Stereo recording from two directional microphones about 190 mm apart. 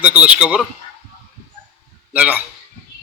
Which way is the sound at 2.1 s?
10° right (ahead or behind).